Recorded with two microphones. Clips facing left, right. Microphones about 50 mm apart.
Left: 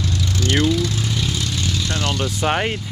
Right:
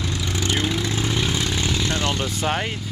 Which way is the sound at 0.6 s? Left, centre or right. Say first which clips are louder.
Left 3 dB; right.